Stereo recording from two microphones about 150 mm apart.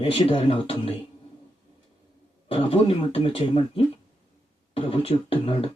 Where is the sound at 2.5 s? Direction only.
45° left (ahead or behind).